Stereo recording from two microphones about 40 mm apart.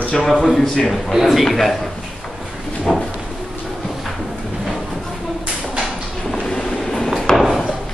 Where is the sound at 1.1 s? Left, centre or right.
Centre.